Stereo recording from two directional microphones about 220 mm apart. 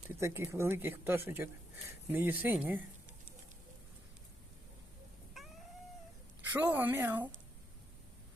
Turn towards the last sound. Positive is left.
turn(degrees=-10)  # may be behind; listen again after turning